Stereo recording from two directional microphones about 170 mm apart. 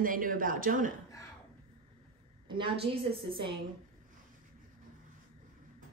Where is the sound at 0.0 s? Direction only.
55° right (ahead or behind).